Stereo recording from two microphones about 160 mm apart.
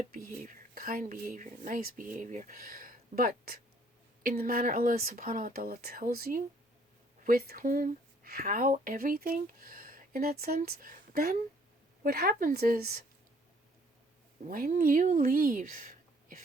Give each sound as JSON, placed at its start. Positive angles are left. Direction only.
{"t": 0.1, "sound": "speech", "side_deg": -60}
{"t": 14.4, "sound": "speech", "side_deg": -60}